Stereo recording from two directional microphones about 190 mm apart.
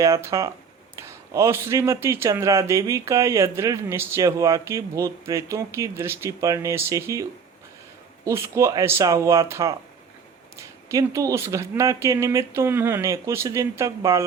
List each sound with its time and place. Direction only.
0.0 s a man's voice: 15° right (ahead or behind)